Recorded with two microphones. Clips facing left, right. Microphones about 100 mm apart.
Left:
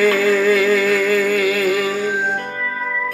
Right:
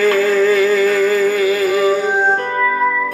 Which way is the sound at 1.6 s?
15° right (ahead or behind).